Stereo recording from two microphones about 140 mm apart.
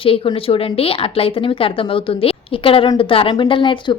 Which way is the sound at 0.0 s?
40° left (ahead or behind).